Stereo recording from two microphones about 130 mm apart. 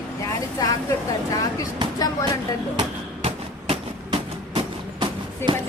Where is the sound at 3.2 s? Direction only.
50° right (ahead or behind).